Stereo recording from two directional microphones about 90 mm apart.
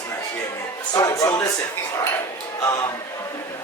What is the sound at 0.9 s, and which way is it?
Music, 40° left (ahead or behind).